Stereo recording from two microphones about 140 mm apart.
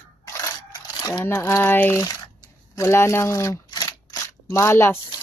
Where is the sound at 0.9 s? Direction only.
20° left (ahead or behind).